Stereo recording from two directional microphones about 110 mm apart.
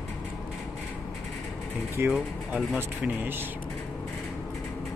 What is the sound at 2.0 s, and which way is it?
Speech, 20° right (ahead or behind).